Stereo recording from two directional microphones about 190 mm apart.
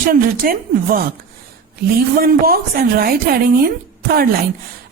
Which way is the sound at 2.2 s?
50° right (ahead or behind).